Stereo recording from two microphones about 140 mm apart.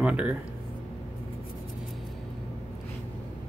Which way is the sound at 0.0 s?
10° right (ahead or behind).